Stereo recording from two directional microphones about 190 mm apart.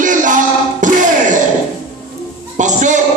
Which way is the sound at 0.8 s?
40° right (ahead or behind).